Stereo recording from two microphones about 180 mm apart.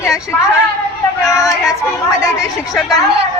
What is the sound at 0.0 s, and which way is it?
Speech, 15° left (ahead or behind).